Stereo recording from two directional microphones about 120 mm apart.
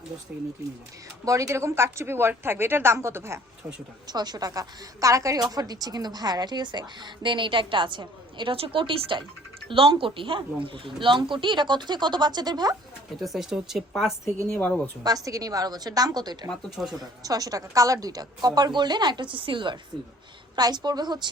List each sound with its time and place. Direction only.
0.3 s speech: 10° right (ahead or behind)
1.2 s a woman's voice: 25° right (ahead or behind)
4.0 s a woman's voice: 35° right (ahead or behind)
13.2 s speech: centre (ahead or behind)
15.0 s a woman's voice: 30° right (ahead or behind)
16.5 s speech: 5° right (ahead or behind)
17.0 s a woman's voice: 30° right (ahead or behind)